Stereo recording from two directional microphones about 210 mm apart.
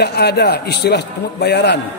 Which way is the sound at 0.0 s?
50° left (ahead or behind).